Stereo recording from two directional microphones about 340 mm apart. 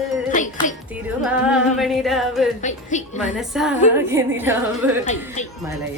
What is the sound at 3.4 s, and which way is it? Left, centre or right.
Music, centre.